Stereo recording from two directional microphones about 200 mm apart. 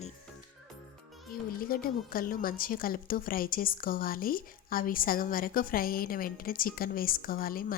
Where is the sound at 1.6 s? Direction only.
45° left (ahead or behind).